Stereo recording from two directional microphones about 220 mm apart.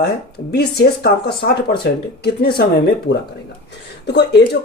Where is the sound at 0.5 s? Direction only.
50° left (ahead or behind).